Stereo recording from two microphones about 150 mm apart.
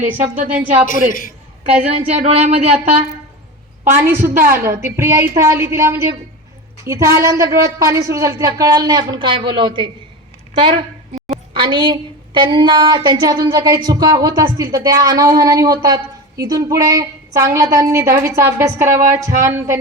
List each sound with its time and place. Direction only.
0.0 s a woman's voice: 55° right (ahead or behind)
0.6 s a woman's voice: 10° right (ahead or behind)
0.9 s a man's voice: 65° left (ahead or behind)
2.0 s speech: 45° right (ahead or behind)
4.4 s a woman's voice: 15° right (ahead or behind)